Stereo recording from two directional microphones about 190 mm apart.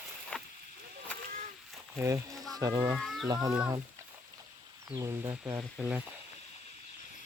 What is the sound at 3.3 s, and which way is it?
Speech, 20° right (ahead or behind).